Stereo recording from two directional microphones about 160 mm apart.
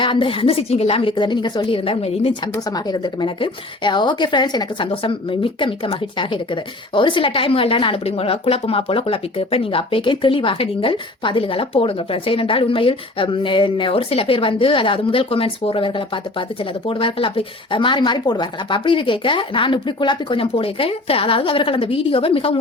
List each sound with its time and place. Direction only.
0.0 s speech: 30° left (ahead or behind)
2.7 s a woman's voice: 25° left (ahead or behind)
16.9 s speech: 35° left (ahead or behind)